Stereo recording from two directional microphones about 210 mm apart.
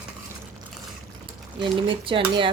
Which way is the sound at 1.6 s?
25° right (ahead or behind).